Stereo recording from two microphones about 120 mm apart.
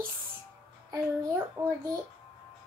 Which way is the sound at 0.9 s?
20° right (ahead or behind).